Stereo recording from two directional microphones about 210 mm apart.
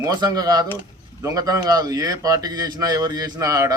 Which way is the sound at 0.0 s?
20° right (ahead or behind).